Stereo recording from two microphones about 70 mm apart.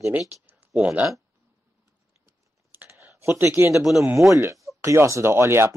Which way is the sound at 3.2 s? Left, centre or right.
Right.